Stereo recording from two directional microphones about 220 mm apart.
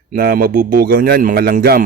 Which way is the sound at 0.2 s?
40° right (ahead or behind).